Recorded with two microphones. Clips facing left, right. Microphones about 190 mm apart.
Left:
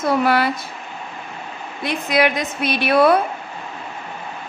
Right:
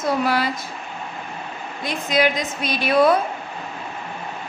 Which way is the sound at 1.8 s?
60° left (ahead or behind).